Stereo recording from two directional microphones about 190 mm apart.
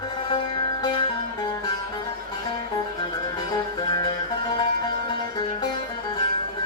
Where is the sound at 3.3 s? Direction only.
20° left (ahead or behind).